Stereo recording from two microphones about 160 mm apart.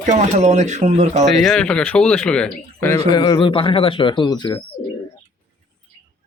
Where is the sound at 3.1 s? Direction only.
25° left (ahead or behind).